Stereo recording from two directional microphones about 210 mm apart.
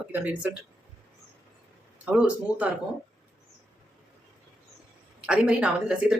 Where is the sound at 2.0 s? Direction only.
5° right (ahead or behind).